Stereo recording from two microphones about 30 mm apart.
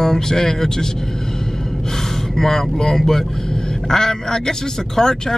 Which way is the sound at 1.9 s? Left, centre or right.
Centre.